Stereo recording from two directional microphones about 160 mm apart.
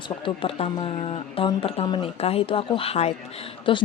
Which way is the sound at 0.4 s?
35° left (ahead or behind).